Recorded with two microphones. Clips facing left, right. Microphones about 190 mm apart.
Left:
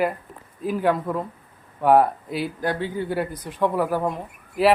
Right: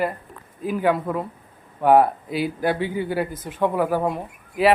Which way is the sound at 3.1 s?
Centre (ahead or behind).